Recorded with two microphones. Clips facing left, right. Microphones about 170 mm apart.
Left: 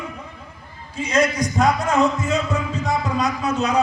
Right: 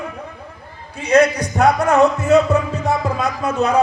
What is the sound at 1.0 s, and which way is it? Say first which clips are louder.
Speech: right 6 dB; 60° right (ahead or behind).